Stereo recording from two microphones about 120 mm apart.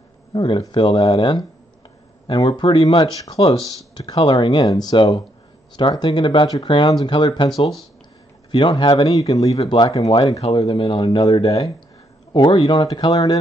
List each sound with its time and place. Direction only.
0.3 s speech: 40° left (ahead or behind)
2.4 s speech: 45° left (ahead or behind)
9.3 s speech: 30° left (ahead or behind)
10.4 s speech: 50° left (ahead or behind)
11.0 s speech: 35° left (ahead or behind)
12.3 s speech: 40° left (ahead or behind)